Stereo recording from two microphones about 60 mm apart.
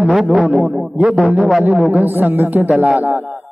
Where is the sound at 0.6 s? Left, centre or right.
Right.